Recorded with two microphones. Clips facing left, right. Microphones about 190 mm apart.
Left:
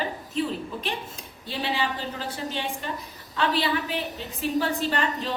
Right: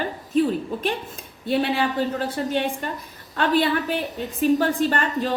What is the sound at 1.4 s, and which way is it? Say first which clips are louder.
A woman's voice: right 7 dB; 55° right (ahead or behind).